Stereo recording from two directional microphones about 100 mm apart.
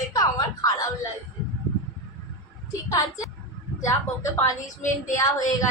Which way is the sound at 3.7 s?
30° left (ahead or behind).